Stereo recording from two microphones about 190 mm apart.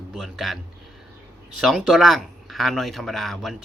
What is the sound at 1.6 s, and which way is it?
Speech, centre (ahead or behind).